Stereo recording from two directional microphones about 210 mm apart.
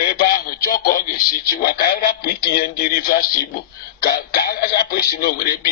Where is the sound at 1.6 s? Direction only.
45° left (ahead or behind).